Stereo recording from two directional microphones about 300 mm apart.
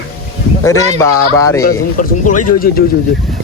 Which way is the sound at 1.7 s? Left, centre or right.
Left.